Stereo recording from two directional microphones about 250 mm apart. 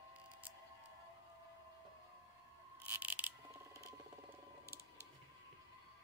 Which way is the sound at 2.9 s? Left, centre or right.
Centre.